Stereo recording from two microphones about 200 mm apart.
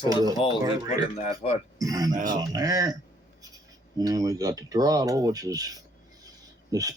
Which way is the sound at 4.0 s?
20° right (ahead or behind).